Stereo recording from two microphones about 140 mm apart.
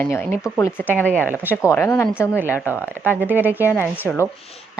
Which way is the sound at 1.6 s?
20° left (ahead or behind).